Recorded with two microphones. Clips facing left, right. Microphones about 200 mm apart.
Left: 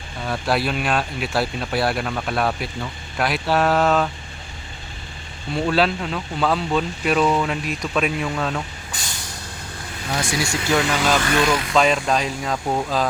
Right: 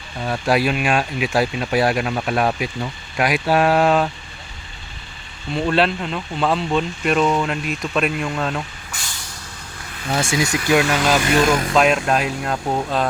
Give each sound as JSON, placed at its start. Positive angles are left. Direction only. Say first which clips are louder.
{"t": 0.3, "sound": "speech", "louder": "right 3 dB", "side_deg": -10}
{"t": 5.5, "sound": "speech", "louder": "right 1 dB", "side_deg": 0}
{"t": 10.2, "sound": "speech", "louder": "right 4 dB", "side_deg": -25}
{"t": 11.3, "sound": "speech", "louder": "right 3 dB", "side_deg": -45}
{"t": 11.7, "sound": "speech", "louder": "right 2 dB", "side_deg": -5}